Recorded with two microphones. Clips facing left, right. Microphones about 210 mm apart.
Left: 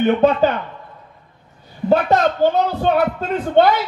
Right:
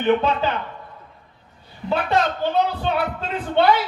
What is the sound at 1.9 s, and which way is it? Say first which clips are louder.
A man's voice: left 6 dB; 45° left (ahead or behind).